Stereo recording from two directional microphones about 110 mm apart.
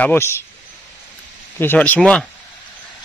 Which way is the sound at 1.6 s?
15° left (ahead or behind).